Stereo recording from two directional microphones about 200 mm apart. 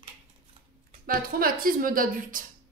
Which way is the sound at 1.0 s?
45° right (ahead or behind).